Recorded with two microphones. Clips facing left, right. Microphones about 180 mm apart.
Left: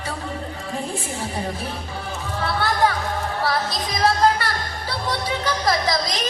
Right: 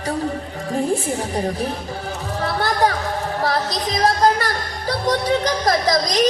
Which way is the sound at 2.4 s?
40° right (ahead or behind).